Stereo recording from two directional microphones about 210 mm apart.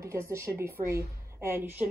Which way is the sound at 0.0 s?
15° right (ahead or behind).